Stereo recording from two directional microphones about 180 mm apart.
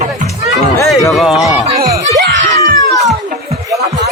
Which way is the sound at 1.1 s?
Centre (ahead or behind).